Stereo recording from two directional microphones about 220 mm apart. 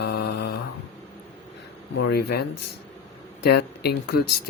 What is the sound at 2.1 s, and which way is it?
Speech, 45° left (ahead or behind).